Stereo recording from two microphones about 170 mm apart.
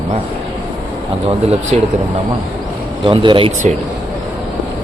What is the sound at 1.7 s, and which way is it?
Speech, 40° right (ahead or behind).